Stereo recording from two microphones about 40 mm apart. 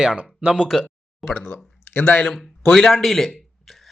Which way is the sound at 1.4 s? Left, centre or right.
Left.